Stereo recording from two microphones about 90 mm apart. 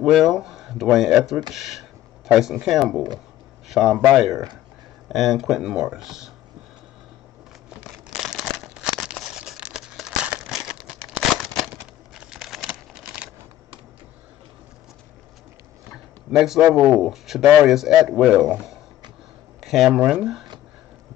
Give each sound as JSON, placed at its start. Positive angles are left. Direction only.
{"t": 0.0, "sound": "a man's voice", "side_deg": 0}
{"t": 4.3, "sound": "speech", "side_deg": -45}
{"t": 5.0, "sound": "a man's voice", "side_deg": 0}
{"t": 8.1, "sound": "crumpling", "side_deg": -5}
{"t": 11.3, "sound": "a sound", "side_deg": -5}
{"t": 16.3, "sound": "a man's voice", "side_deg": -5}